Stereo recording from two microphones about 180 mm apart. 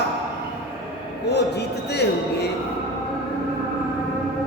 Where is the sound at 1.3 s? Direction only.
65° left (ahead or behind).